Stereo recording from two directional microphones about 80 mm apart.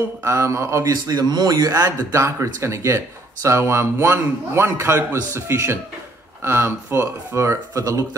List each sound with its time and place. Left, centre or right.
0.2 s a man's voice: right
1.0 s a man's voice: right